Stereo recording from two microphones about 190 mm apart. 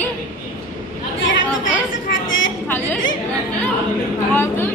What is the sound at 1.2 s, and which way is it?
Chatter, 80° left.